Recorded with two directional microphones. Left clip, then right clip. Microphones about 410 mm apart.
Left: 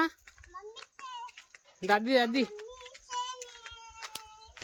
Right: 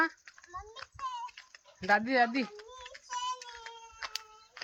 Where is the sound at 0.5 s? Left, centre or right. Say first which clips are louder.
Right 2 dB; centre.